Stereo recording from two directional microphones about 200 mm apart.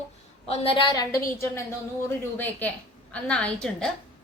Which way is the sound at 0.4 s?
30° left (ahead or behind).